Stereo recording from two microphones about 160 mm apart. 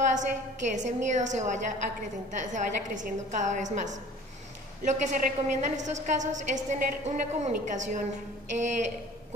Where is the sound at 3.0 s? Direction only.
50° right (ahead or behind).